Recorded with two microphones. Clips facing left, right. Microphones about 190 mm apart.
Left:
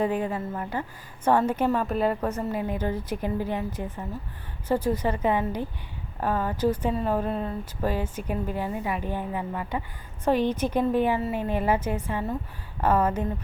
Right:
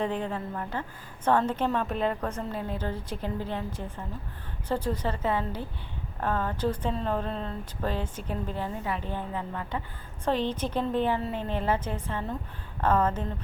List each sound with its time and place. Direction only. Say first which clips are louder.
0.0 s speech: left 4 dB; 10° left (ahead or behind)